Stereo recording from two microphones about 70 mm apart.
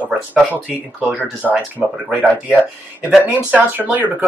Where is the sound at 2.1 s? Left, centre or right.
Centre.